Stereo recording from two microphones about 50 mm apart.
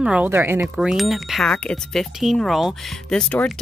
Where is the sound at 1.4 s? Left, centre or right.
Centre.